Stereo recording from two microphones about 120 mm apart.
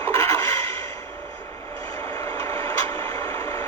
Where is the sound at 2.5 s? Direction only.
30° left (ahead or behind).